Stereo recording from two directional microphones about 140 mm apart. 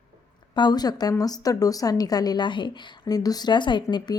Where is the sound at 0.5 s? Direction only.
30° left (ahead or behind).